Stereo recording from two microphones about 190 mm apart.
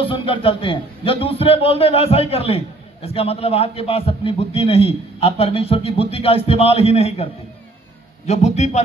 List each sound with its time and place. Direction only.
0.0 s a man's voice: 25° left (ahead or behind)
8.3 s a man's voice: 35° left (ahead or behind)